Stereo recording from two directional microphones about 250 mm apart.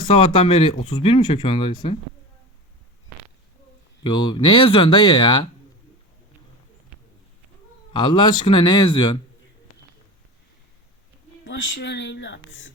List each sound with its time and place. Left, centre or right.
0.0 s speech: centre
4.0 s speech: centre
7.9 s speech: centre
11.4 s speech: left